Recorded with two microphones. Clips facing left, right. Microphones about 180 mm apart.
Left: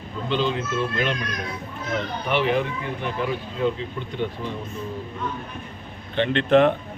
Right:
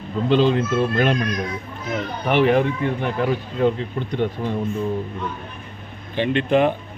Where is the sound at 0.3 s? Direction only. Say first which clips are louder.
Right 7 dB; 45° right (ahead or behind).